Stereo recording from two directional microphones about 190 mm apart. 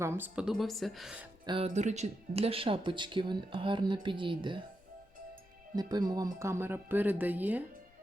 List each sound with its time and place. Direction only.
0.0 s speech: 10° right (ahead or behind)
1.6 s speech: 40° right (ahead or behind)
5.7 s speech: 20° right (ahead or behind)